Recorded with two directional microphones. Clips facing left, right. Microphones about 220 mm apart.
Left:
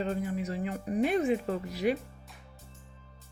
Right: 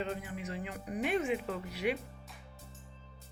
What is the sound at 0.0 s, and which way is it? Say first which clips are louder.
Speech: left 6 dB; 40° left (ahead or behind).